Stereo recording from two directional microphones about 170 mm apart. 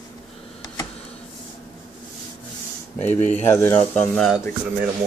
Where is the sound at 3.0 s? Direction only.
45° left (ahead or behind).